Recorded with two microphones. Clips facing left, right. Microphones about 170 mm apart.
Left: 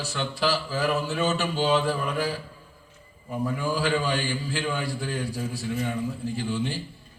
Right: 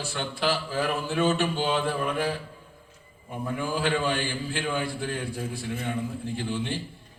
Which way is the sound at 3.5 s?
55° right (ahead or behind).